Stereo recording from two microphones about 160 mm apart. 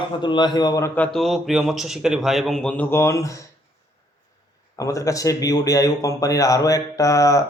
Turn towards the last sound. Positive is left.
turn(degrees=20)  # may be behind; listen again after turning